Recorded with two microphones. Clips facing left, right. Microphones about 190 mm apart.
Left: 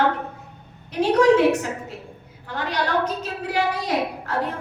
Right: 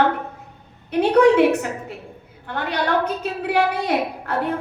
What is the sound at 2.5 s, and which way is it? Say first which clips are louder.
A woman's voice: right 2 dB; 60° right (ahead or behind).